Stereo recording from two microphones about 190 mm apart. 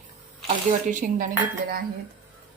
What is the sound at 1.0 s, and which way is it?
Speech, 45° right (ahead or behind).